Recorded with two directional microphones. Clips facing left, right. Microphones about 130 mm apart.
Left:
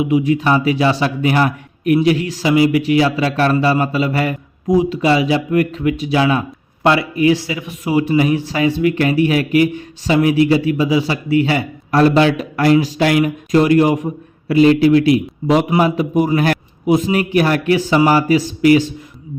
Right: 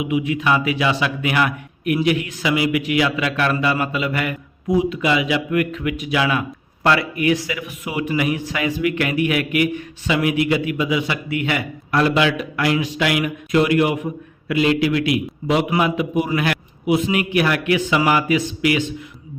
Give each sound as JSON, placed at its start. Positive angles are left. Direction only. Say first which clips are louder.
{"t": 0.0, "sound": "a man's voice", "louder": "left 6 dB", "side_deg": 35}